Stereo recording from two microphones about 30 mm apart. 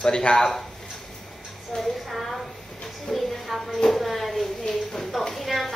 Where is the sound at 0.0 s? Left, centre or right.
Left.